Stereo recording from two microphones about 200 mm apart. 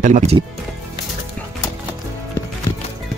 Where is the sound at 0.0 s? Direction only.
35° right (ahead or behind).